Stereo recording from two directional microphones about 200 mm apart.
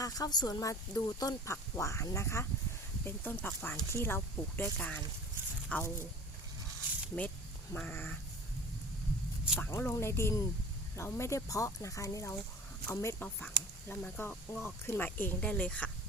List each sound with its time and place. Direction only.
0.0 s speech: 20° left (ahead or behind)
7.7 s speech: 10° left (ahead or behind)
9.6 s speech: 10° left (ahead or behind)